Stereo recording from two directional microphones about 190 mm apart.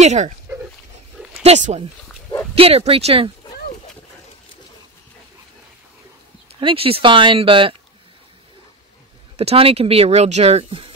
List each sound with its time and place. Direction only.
0.0 s speech: 40° right (ahead or behind)
1.4 s speech: 35° right (ahead or behind)
6.5 s speech: 30° right (ahead or behind)
9.4 s speech: 30° right (ahead or behind)